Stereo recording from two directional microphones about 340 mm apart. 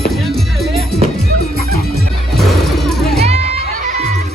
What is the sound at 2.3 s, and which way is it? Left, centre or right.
Music, centre.